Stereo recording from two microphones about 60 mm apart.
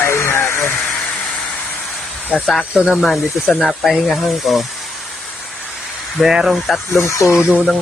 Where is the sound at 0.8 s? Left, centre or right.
Centre.